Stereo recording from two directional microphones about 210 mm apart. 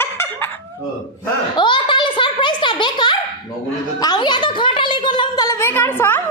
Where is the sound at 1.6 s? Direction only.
20° left (ahead or behind).